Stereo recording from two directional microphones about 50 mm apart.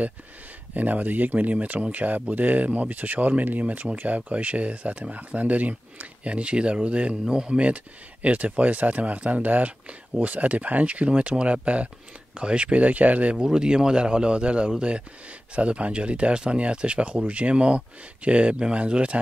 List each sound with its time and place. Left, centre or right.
0.7 s speech: right